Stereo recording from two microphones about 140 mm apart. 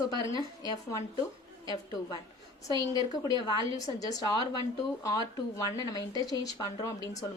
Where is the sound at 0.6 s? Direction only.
25° left (ahead or behind).